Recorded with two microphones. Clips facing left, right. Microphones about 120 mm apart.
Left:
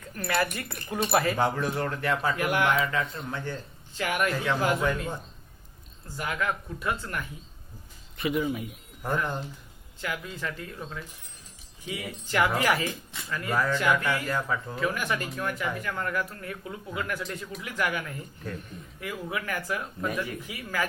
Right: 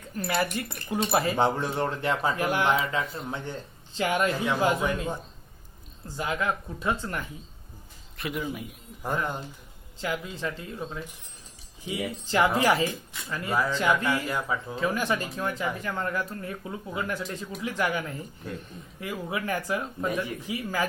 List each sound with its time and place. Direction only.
0.5 s speech: 25° right (ahead or behind)
6.1 s speech: 25° right (ahead or behind)
8.1 s speech: centre (ahead or behind)
9.0 s speech: 15° right (ahead or behind)
10.0 s speech: 25° right (ahead or behind); by 14.8 s 10° right (ahead or behind)
14.8 s speech: 25° right (ahead or behind)